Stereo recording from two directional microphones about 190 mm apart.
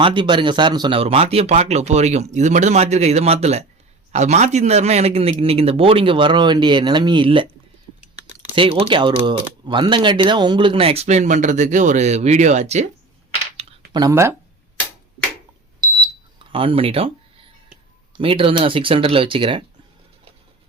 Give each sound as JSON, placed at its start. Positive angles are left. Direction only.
{"t": 0.0, "sound": "speech", "side_deg": -25}
{"t": 8.5, "sound": "speech", "side_deg": -30}
{"t": 13.9, "sound": "speech", "side_deg": -20}
{"t": 15.8, "sound": "smoke detector", "side_deg": -25}
{"t": 18.1, "sound": "speech", "side_deg": -30}